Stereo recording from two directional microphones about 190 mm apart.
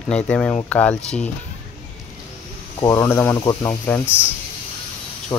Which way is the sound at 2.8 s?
15° left (ahead or behind).